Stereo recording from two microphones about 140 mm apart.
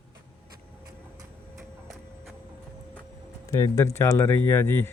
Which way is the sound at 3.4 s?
25° left (ahead or behind).